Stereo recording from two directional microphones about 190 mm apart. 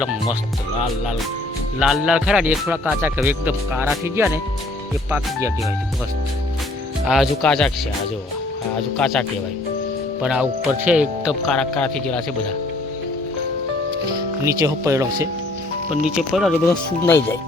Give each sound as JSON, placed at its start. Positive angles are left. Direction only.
{"t": 1.8, "sound": "speech", "side_deg": -5}
{"t": 7.0, "sound": "speech", "side_deg": 0}
{"t": 9.0, "sound": "speech", "side_deg": 5}
{"t": 14.4, "sound": "speech", "side_deg": -15}
{"t": 16.1, "sound": "speech", "side_deg": 0}
{"t": 16.6, "sound": "speech", "side_deg": 10}